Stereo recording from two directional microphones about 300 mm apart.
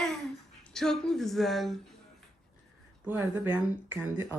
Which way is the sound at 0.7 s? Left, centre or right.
Centre.